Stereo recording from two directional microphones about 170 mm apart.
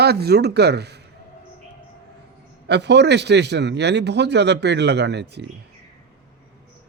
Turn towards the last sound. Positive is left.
turn(degrees=-85)